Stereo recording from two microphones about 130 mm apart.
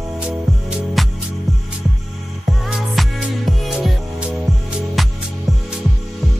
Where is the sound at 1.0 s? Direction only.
Centre (ahead or behind).